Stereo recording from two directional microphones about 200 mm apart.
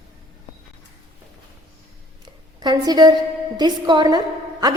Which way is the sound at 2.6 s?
20° right (ahead or behind).